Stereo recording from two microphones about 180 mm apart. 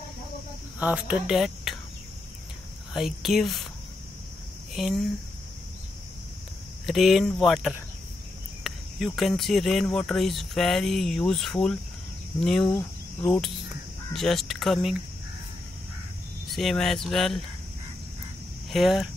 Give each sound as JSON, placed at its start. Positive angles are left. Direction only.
{"t": 0.7, "sound": "speech", "side_deg": -5}
{"t": 2.9, "sound": "speech", "side_deg": 0}
{"t": 4.7, "sound": "speech", "side_deg": 0}
{"t": 6.9, "sound": "speech", "side_deg": 0}
{"t": 16.4, "sound": "speech", "side_deg": 0}
{"t": 18.7, "sound": "speech", "side_deg": 0}